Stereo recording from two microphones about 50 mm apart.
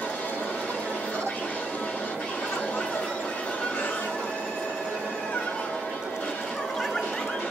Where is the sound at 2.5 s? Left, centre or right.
Left.